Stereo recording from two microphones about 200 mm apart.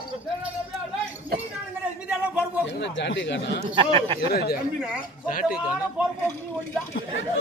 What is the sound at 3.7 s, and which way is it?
Speech, 25° right (ahead or behind).